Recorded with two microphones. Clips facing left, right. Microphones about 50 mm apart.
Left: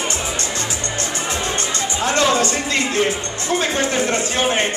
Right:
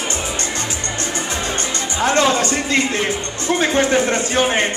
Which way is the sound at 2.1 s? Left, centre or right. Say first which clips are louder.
Right 1 dB; right.